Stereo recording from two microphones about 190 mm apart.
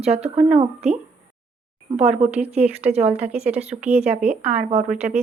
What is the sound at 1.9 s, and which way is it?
Speech, 35° right (ahead or behind).